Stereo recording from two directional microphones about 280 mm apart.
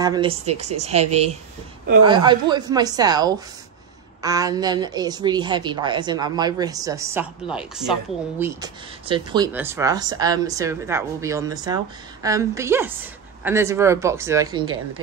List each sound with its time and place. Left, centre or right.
0.0 s a woman's voice: centre